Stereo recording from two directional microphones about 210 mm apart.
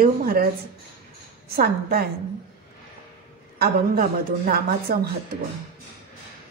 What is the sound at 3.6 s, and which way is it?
A woman's voice, 45° right (ahead or behind).